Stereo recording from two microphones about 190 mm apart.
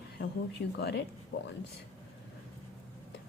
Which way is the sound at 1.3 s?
75° left (ahead or behind).